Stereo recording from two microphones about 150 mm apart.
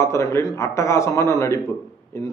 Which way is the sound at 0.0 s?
20° left (ahead or behind).